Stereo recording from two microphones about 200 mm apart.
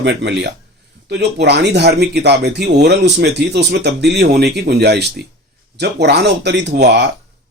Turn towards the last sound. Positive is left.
turn(degrees=-55)  # may be behind; listen again after turning